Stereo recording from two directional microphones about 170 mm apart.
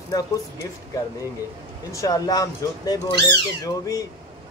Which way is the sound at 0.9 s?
20° left (ahead or behind).